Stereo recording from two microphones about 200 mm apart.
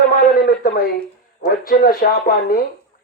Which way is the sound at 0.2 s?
45° left (ahead or behind).